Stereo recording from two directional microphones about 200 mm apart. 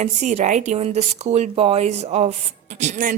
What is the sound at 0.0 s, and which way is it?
A woman's voice, 35° right (ahead or behind).